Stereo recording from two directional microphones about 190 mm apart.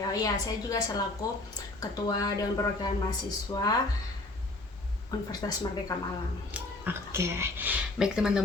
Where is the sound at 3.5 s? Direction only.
20° left (ahead or behind).